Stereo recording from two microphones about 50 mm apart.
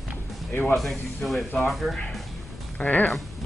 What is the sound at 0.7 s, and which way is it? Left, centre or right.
Speech, centre.